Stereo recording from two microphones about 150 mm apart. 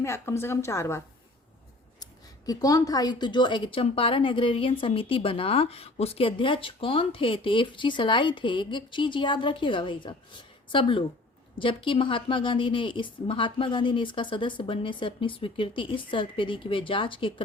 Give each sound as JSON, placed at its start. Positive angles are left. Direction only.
{"t": 0.0, "sound": "a woman's voice", "side_deg": 20}
{"t": 2.5, "sound": "speech", "side_deg": 25}